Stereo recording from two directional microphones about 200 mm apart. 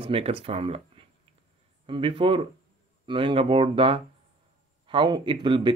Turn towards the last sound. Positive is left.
turn(degrees=-25)  # may be behind; listen again after turning